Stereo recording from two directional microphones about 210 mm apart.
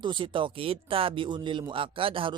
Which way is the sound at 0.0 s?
20° right (ahead or behind).